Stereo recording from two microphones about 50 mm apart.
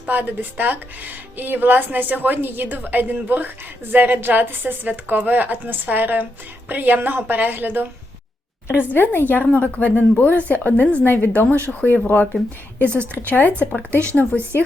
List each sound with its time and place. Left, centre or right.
0.1 s a woman's voice: right
8.6 s a woman's voice: left
8.9 s a woman's voice: left
9.4 s a woman's voice: left
11.3 s a woman's voice: left